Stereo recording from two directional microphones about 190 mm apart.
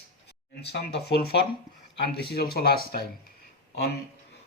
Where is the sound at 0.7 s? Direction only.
60° left (ahead or behind).